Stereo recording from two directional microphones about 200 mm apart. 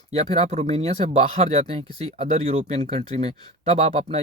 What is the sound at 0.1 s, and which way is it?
Speech, 30° right (ahead or behind).